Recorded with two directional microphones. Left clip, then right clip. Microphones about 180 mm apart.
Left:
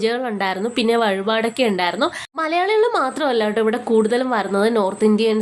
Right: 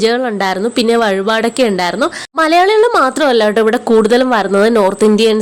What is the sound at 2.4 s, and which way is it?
A woman's voice, 45° right (ahead or behind).